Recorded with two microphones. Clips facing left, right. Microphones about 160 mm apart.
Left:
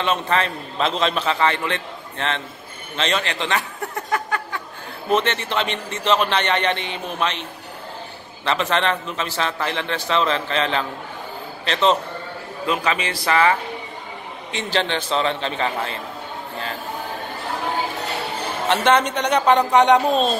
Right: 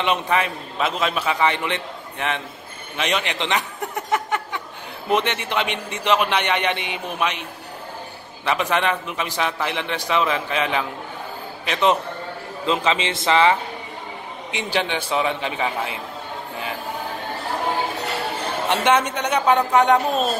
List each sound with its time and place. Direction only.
0.0 s a man's voice: 15° right (ahead or behind)
8.5 s a man's voice: 10° right (ahead or behind)
12.6 s a man's voice: 25° right (ahead or behind)
18.7 s a man's voice: 10° right (ahead or behind)